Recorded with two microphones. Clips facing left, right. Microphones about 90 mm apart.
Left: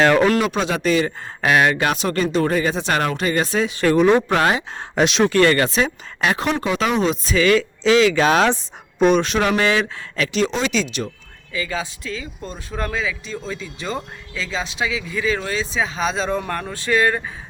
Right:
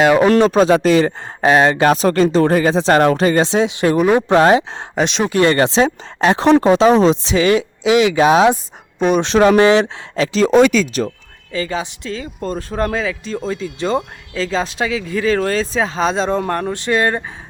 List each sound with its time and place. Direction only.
0.0 s speech: 15° right (ahead or behind)
0.3 s speech: 35° right (ahead or behind); by 4.2 s 10° right (ahead or behind)
4.3 s speech: 30° right (ahead or behind)
4.9 s speech: centre (ahead or behind)
5.3 s speech: 20° right (ahead or behind)
9.0 s speech: centre (ahead or behind)
9.2 s speech: 30° right (ahead or behind)
10.5 s speech: 50° right (ahead or behind)
11.5 s speech: 35° right (ahead or behind)
12.2 s speech: 45° right (ahead or behind); by 17.2 s 30° right (ahead or behind)